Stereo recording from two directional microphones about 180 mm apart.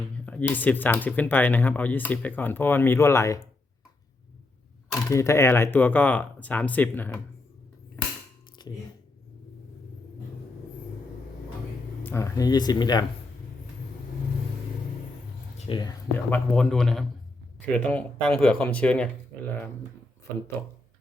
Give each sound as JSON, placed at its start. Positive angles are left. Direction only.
{"t": 0.3, "sound": "speech", "side_deg": 10}
{"t": 5.0, "sound": "speech", "side_deg": 15}
{"t": 8.6, "sound": "a sound", "side_deg": 25}
{"t": 12.0, "sound": "speech", "side_deg": 15}
{"t": 15.5, "sound": "a sound", "side_deg": 35}
{"t": 15.8, "sound": "speech", "side_deg": 15}